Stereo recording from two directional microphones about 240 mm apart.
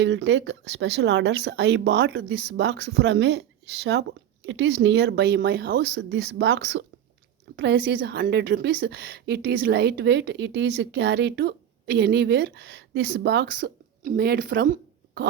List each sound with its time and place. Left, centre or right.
0.0 s a woman's voice: right